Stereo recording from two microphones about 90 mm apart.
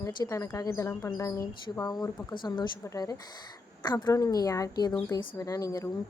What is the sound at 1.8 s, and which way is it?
Speech, 50° left (ahead or behind).